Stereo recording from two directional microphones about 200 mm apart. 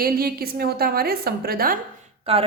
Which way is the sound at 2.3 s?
30° right (ahead or behind).